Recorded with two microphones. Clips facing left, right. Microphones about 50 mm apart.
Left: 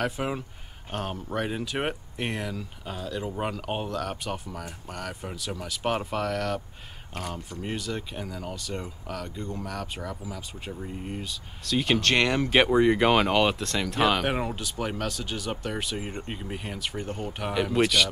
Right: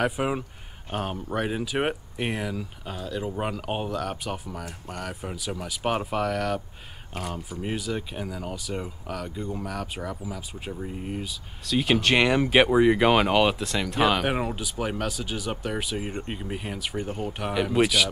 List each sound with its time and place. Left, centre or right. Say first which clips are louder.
0.0 s speech: right 3 dB; centre